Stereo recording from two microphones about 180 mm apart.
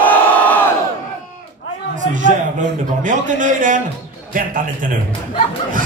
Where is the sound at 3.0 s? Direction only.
45° right (ahead or behind).